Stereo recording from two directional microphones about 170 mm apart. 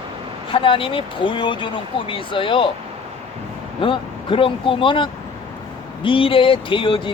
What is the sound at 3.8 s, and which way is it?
Speech, 30° left (ahead or behind).